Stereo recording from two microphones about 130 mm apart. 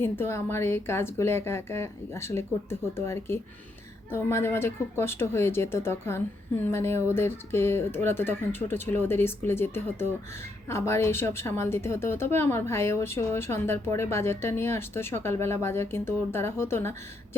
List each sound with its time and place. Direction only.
0.0 s a woman's voice: 20° left (ahead or behind)